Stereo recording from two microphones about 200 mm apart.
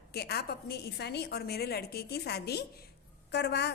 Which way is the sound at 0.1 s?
55° left (ahead or behind).